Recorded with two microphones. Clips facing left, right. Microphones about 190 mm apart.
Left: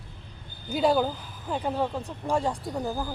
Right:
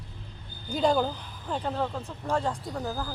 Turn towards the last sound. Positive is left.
turn(degrees=15)  # may be behind; listen again after turning